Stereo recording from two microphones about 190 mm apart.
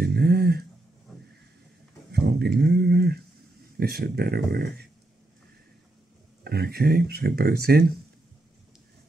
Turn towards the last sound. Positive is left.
turn(degrees=-55)  # may be behind; listen again after turning